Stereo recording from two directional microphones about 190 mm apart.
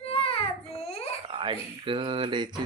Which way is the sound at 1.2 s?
25° right (ahead or behind).